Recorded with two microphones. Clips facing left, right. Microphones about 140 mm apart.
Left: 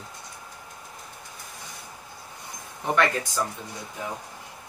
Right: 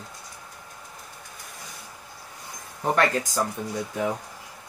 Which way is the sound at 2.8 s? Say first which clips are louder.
Right 1 dB; 40° right (ahead or behind).